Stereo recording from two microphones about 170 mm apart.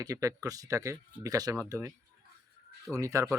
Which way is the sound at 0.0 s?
20° right (ahead or behind).